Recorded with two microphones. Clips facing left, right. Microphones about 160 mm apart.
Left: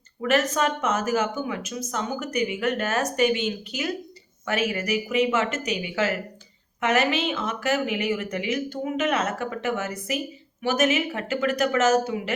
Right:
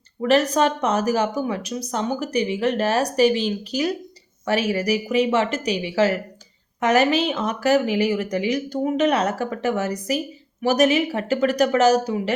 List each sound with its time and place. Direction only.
0.2 s speech: 35° right (ahead or behind)